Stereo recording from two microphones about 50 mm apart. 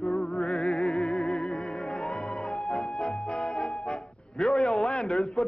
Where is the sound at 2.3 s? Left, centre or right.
Centre.